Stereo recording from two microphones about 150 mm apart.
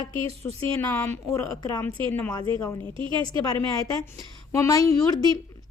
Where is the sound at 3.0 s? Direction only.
35° right (ahead or behind).